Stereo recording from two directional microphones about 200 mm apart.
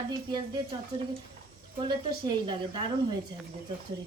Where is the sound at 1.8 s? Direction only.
25° right (ahead or behind).